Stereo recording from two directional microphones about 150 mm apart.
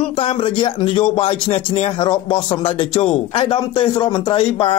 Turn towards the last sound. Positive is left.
turn(degrees=35)  # may be behind; listen again after turning